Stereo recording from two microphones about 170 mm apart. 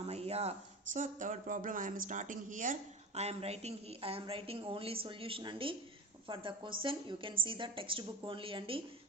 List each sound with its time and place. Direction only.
0.0 s a sound: 35° right (ahead or behind)
0.9 s speech: 45° right (ahead or behind)
3.2 s a woman's voice: 35° right (ahead or behind)